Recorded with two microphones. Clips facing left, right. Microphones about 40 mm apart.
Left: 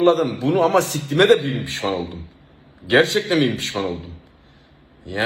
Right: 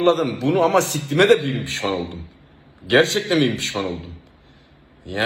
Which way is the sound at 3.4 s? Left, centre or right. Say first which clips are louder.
Even; right.